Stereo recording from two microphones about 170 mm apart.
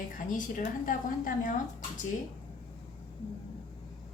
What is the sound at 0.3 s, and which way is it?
A woman's voice, 50° left (ahead or behind).